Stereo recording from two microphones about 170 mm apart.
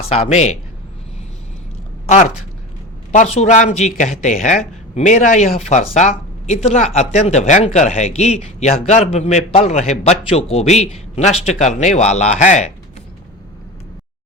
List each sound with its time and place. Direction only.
0.3 s speech: 40° left (ahead or behind)
2.0 s speech: 45° left (ahead or behind)